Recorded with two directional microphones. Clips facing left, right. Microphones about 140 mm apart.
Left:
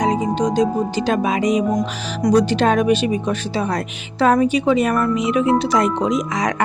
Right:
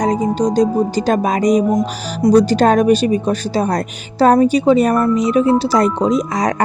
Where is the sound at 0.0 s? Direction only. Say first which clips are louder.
Right 3 dB; 40° right (ahead or behind).